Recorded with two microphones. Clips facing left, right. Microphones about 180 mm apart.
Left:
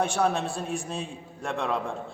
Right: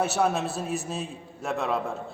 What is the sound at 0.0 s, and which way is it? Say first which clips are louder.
A man's voice: even; 5° right (ahead or behind).